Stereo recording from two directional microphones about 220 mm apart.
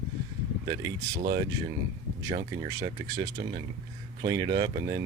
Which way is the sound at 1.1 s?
45° right (ahead or behind).